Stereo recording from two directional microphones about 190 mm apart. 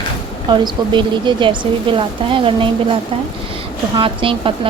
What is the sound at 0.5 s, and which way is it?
A woman's voice, 25° right (ahead or behind).